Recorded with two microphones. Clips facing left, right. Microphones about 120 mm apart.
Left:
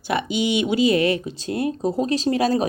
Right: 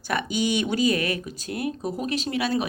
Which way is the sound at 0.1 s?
20° left (ahead or behind).